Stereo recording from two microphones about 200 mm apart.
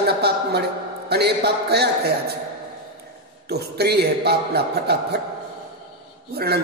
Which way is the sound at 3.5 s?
55° right (ahead or behind).